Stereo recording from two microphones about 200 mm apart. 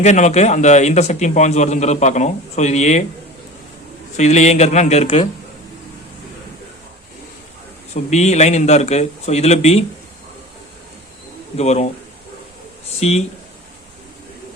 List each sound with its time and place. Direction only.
0.0 s a man's voice: 35° left (ahead or behind)
4.2 s a man's voice: 35° left (ahead or behind)
8.1 s a man's voice: 35° left (ahead or behind)
11.5 s a man's voice: 35° left (ahead or behind)
13.0 s a man's voice: 30° left (ahead or behind)